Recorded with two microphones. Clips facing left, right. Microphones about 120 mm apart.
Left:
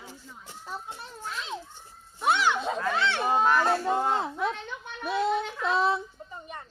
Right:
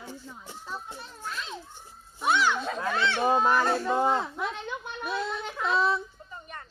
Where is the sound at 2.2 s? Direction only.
20° left (ahead or behind).